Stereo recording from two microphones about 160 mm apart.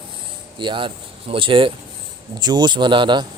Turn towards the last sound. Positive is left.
turn(degrees=-30)  # may be behind; listen again after turning